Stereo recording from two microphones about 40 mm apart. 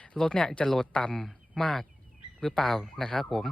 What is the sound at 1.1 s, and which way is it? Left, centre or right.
Speech, centre.